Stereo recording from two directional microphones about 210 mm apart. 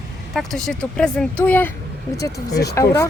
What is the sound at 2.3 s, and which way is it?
Speech, 50° left (ahead or behind).